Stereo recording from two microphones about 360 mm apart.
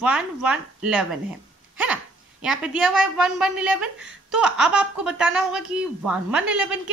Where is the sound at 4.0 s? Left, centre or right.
Right.